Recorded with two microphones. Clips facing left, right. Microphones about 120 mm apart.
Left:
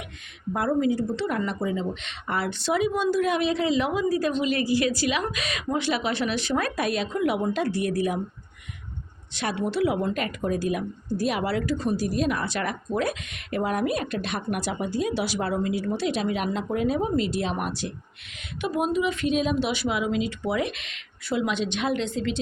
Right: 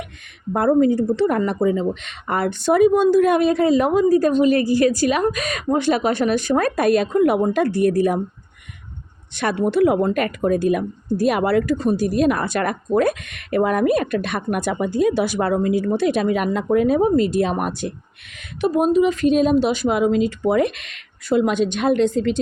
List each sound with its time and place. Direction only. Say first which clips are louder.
0.5 s a woman's voice: right 8 dB; 50° right (ahead or behind)
9.3 s a woman's voice: right 8 dB; 50° right (ahead or behind)
18.6 s a woman's voice: right 8 dB; 40° right (ahead or behind)